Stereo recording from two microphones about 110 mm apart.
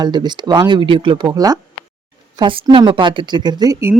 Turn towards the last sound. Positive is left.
turn(degrees=-35)  # may be behind; listen again after turning